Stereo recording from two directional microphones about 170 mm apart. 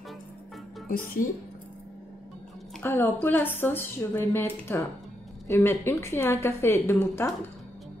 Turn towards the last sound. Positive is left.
turn(degrees=15)  # may be behind; listen again after turning